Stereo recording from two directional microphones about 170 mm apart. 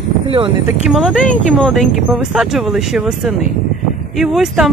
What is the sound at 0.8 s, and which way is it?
Speech, centre (ahead or behind).